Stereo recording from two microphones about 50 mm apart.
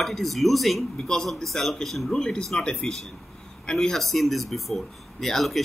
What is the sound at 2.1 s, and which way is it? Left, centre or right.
Speech, centre.